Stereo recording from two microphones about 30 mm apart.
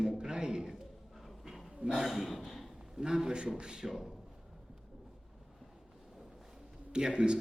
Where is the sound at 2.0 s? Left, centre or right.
Centre.